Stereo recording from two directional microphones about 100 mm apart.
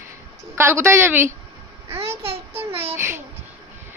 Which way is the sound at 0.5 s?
25° right (ahead or behind).